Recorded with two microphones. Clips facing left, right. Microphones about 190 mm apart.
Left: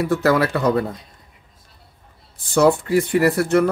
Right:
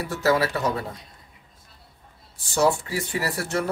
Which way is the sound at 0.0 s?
60° left (ahead or behind).